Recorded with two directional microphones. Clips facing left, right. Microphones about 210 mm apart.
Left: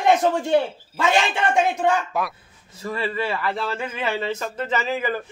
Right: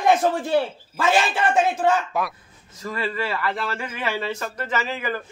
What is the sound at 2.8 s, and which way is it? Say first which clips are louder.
Speech: left 1 dB; 20° left (ahead or behind).